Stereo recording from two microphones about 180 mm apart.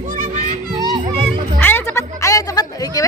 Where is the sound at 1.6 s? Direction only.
10° left (ahead or behind).